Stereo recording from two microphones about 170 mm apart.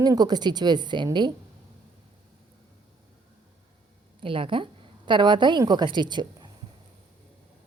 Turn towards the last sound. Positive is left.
turn(degrees=-25)  # may be behind; listen again after turning